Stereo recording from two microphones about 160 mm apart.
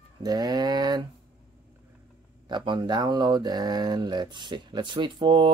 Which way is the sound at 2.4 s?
30° right (ahead or behind).